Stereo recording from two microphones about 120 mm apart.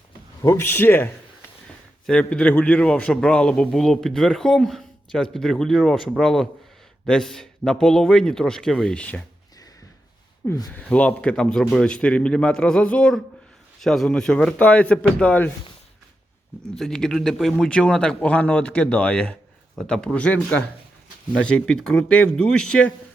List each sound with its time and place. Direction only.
0.4 s a man's voice: 20° left (ahead or behind)
10.4 s speech: 30° left (ahead or behind)
10.8 s speech: 10° left (ahead or behind)
16.7 s speech: 5° left (ahead or behind)